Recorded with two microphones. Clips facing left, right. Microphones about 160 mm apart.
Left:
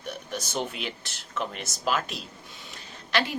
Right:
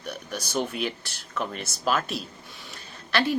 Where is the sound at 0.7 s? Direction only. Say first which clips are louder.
Right 5 dB; 20° left (ahead or behind).